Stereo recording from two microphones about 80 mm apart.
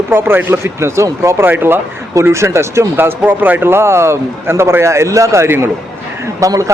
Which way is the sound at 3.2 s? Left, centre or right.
Right.